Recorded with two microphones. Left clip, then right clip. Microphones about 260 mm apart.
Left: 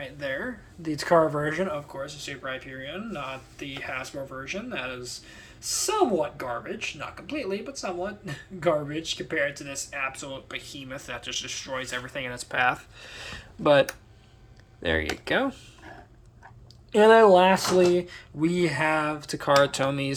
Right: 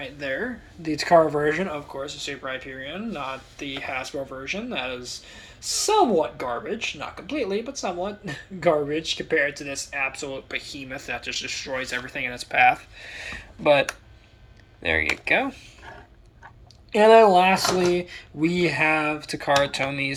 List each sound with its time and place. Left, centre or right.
0.0 s speech: centre; by 15.5 s left
16.9 s speech: left